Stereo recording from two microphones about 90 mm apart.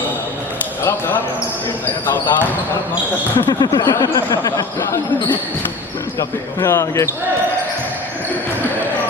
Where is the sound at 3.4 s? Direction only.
50° left (ahead or behind).